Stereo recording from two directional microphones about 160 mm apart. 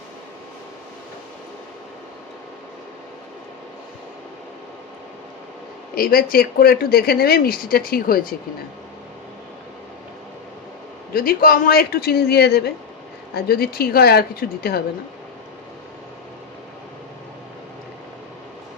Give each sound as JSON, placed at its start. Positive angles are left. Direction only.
{"t": 5.9, "sound": "speech", "side_deg": 70}
{"t": 11.1, "sound": "speech", "side_deg": 65}
{"t": 13.3, "sound": "speech", "side_deg": 70}